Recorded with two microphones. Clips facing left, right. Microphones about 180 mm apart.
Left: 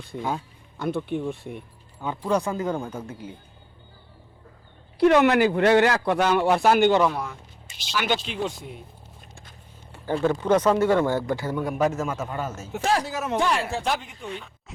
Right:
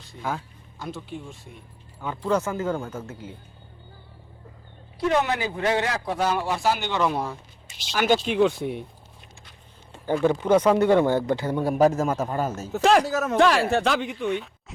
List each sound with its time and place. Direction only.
0.2 s speech: 20° left (ahead or behind)
0.8 s speech: 60° left (ahead or behind)
2.0 s speech: 15° left (ahead or behind)
4.9 s speech: 65° left (ahead or behind)
7.1 s speech: 30° right (ahead or behind)
7.9 s speech: 45° right (ahead or behind)
8.4 s speech: 65° right (ahead or behind)
10.1 s speech: 15° right (ahead or behind)
11.6 s a man's voice: 35° right (ahead or behind)
12.8 s speech: 90° right
13.1 s speech: 45° right (ahead or behind)
13.4 s speech: 80° right